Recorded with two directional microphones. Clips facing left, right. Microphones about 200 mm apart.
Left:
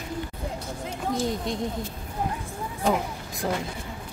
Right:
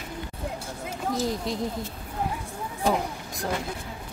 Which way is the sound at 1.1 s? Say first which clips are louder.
Even; centre (ahead or behind).